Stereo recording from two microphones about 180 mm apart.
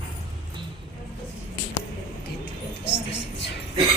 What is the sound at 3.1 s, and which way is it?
Music, 80° left.